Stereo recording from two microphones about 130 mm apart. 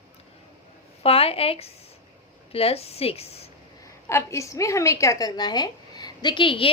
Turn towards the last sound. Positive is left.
turn(degrees=45)  # may be behind; listen again after turning